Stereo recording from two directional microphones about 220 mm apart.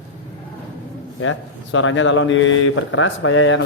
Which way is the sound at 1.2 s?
65° left (ahead or behind).